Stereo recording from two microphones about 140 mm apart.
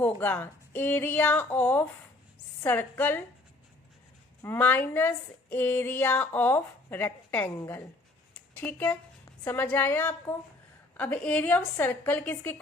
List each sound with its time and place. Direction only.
0.0 s speech: 10° left (ahead or behind)
4.4 s speech: 15° left (ahead or behind)
8.5 s speech: 15° left (ahead or behind)